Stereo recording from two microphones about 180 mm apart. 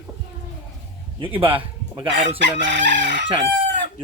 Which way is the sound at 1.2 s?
30° right (ahead or behind).